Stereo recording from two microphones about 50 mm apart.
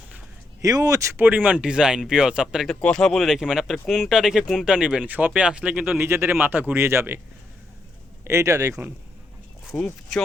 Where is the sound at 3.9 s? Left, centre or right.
Centre.